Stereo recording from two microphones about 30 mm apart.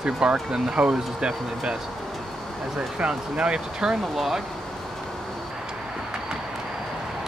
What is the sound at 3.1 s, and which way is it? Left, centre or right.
Speech, right.